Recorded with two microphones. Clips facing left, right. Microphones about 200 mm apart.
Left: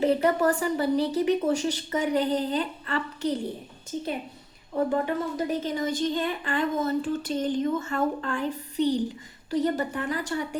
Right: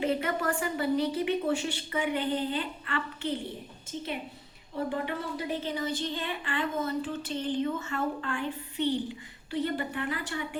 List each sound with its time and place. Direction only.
0.0 s a woman's voice: 40° left (ahead or behind)
4.9 s speech: 45° left (ahead or behind)